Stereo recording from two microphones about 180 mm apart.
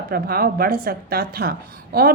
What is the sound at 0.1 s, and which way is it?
A woman's voice, 55° right (ahead or behind).